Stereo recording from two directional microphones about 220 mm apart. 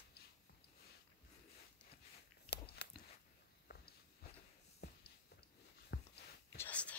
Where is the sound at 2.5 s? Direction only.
50° left (ahead or behind).